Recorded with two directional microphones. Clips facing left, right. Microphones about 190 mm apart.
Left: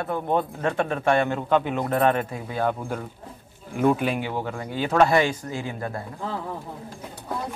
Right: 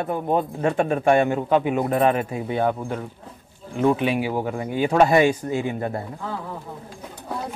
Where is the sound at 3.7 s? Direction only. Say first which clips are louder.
Right 2 dB; 5° left (ahead or behind); by 6.0 s 20° right (ahead or behind).